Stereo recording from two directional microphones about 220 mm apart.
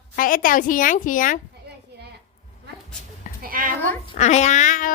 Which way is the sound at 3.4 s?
40° right (ahead or behind).